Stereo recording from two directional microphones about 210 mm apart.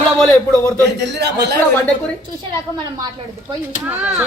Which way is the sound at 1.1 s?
50° right (ahead or behind).